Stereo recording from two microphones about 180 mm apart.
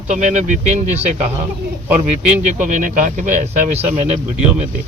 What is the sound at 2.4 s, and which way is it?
Speech, 40° right (ahead or behind).